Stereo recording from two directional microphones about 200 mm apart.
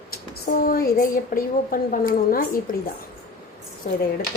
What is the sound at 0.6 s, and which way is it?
A woman's voice, 45° left (ahead or behind).